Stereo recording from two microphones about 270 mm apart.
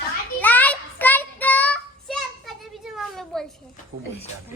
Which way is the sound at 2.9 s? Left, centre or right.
Centre.